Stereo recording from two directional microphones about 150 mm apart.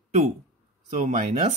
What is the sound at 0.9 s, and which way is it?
Speech, 50° right (ahead or behind).